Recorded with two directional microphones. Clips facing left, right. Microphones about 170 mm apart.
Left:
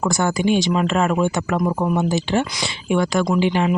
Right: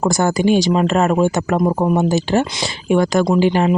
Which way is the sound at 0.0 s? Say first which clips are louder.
Right 4 dB; 40° right (ahead or behind).